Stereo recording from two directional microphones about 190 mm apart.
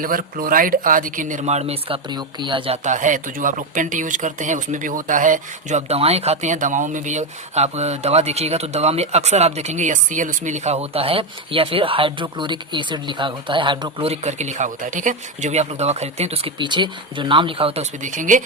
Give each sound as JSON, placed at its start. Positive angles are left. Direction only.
{"t": 0.0, "sound": "speech", "side_deg": -45}
{"t": 2.8, "sound": "speech", "side_deg": -40}